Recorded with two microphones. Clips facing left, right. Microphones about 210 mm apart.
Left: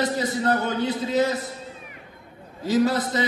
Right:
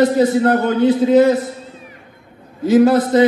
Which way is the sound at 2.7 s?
55° right (ahead or behind).